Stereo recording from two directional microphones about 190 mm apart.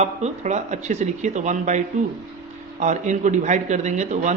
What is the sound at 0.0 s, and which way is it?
A man's voice, 35° right (ahead or behind).